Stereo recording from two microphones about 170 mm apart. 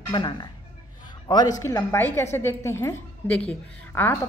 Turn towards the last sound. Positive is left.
turn(degrees=15)  # may be behind; listen again after turning